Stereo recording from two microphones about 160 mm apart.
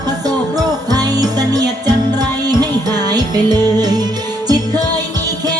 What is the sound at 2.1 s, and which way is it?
Music, 25° right (ahead or behind).